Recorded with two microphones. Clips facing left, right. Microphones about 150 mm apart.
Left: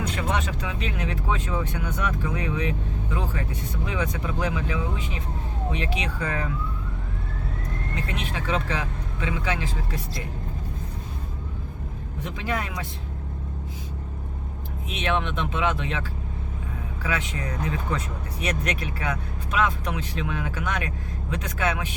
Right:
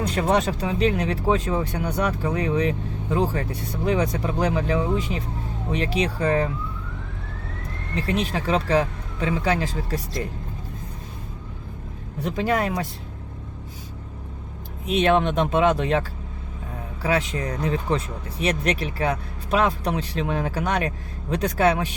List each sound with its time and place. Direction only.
0.0 s speech: 40° right (ahead or behind)
7.9 s speech: 35° right (ahead or behind)
12.2 s speech: 40° right (ahead or behind)
14.8 s speech: 35° right (ahead or behind)